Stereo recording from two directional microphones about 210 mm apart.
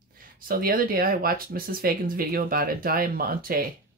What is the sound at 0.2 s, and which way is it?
Speech, 40° right (ahead or behind).